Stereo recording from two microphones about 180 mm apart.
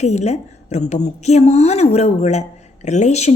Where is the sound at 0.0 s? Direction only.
40° left (ahead or behind).